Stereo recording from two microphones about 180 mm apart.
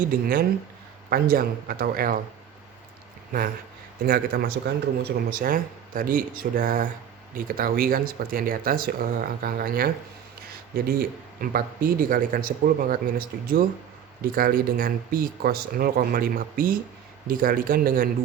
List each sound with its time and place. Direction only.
0.0 s speech: 50° right (ahead or behind)
4.0 s speech: 55° right (ahead or behind)